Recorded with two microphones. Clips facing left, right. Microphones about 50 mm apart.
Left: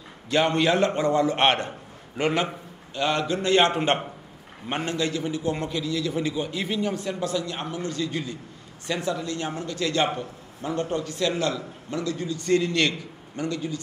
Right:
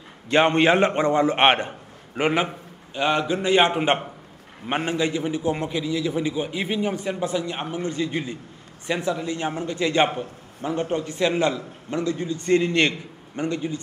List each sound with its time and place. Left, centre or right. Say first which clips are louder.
0.3 s a man's voice: right 4 dB; right